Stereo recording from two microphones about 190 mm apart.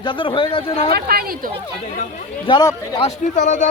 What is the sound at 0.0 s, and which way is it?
Speech, 25° left (ahead or behind).